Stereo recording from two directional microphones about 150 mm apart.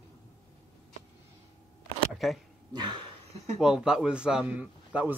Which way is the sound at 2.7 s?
30° right (ahead or behind).